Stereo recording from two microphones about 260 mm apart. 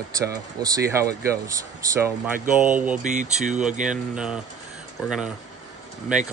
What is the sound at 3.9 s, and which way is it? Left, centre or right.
Speech, centre.